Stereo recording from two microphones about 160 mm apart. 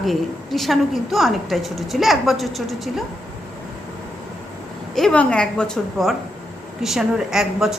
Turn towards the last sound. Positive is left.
turn(degrees=-5)  # may be behind; listen again after turning